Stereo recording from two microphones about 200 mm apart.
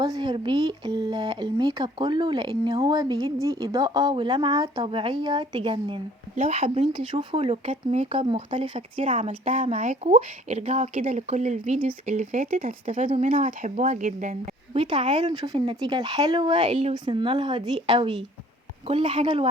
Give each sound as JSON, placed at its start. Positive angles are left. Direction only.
{"t": 0.0, "sound": "speech", "side_deg": -20}
{"t": 9.0, "sound": "speech", "side_deg": -35}
{"t": 12.9, "sound": "speech", "side_deg": -25}
{"t": 14.8, "sound": "speech", "side_deg": -25}